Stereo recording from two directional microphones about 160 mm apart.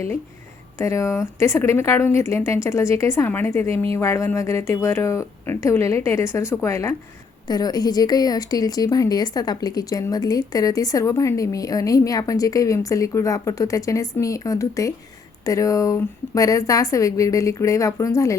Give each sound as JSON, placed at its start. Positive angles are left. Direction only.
{"t": 0.8, "sound": "a woman's voice", "side_deg": 20}